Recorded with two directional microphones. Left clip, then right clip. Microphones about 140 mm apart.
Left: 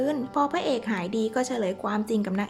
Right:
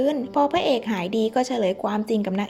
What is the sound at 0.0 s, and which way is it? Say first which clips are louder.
A woman's voice: right 4 dB; 10° right (ahead or behind).